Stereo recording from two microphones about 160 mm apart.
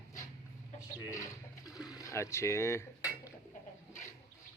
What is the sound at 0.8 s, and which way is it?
Speech, 20° left (ahead or behind).